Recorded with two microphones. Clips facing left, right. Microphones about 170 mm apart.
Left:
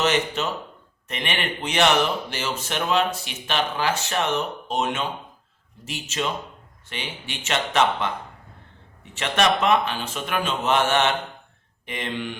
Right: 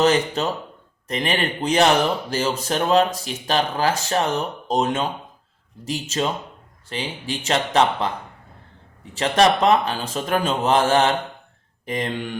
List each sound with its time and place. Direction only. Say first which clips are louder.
0.0 s speech: right 4 dB; 35° right (ahead or behind)
9.1 s speech: right 4 dB; 35° right (ahead or behind)